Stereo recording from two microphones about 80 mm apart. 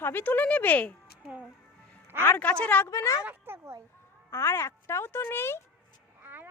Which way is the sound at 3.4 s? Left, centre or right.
Right.